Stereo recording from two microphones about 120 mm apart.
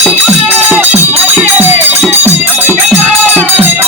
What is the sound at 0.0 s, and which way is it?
Music, 10° right (ahead or behind).